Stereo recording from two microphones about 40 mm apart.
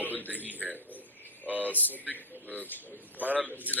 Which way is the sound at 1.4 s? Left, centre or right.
Right.